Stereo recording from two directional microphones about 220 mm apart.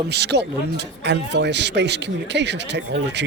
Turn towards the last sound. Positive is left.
turn(degrees=-50)  # may be behind; listen again after turning